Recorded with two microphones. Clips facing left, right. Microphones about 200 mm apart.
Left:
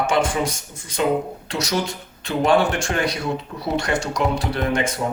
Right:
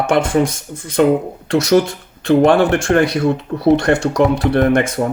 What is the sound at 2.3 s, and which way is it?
Speech, 55° right (ahead or behind).